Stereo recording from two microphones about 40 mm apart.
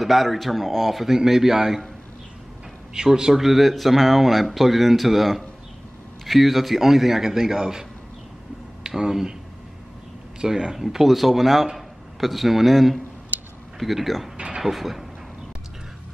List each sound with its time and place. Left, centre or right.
0.0 s speech: centre
3.1 s a man's voice: centre
3.3 s a man's voice: centre
8.8 s speech: centre
10.4 s a man's voice: centre
14.3 s a sound: right
14.6 s speech: centre